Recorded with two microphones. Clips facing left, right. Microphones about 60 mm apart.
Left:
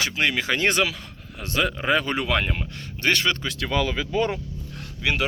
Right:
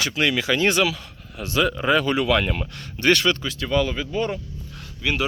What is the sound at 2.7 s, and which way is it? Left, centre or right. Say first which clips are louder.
Speech: right 5 dB; left.